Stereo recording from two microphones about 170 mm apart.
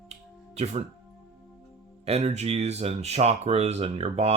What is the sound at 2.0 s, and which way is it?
Speech, 40° right (ahead or behind).